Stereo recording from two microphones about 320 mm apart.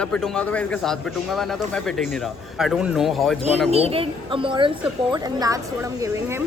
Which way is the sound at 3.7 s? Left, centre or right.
Centre.